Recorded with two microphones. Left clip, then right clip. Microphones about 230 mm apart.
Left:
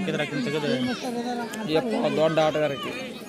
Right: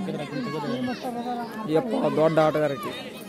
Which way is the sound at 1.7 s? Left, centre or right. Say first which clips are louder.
Right 1 dB; centre.